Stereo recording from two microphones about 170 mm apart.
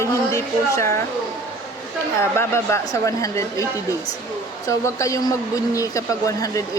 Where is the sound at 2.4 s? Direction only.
15° left (ahead or behind).